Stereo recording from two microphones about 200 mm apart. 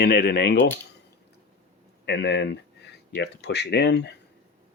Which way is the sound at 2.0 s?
60° left (ahead or behind).